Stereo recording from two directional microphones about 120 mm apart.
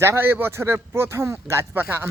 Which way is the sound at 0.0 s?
20° right (ahead or behind).